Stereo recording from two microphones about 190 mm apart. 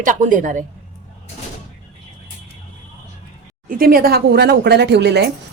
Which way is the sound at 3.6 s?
50° right (ahead or behind).